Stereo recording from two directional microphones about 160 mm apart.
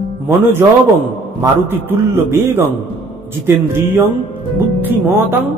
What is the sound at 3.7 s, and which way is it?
A man's voice, 15° right (ahead or behind).